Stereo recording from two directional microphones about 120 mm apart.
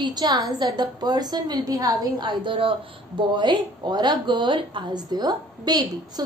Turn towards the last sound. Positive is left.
turn(degrees=-35)  # may be behind; listen again after turning